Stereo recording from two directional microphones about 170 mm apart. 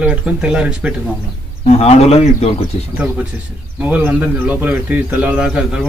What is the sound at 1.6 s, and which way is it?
A man's voice, 40° left (ahead or behind).